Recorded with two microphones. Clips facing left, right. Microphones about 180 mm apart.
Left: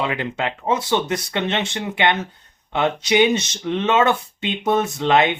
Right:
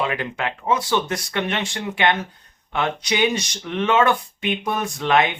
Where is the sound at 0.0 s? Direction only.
25° left (ahead or behind).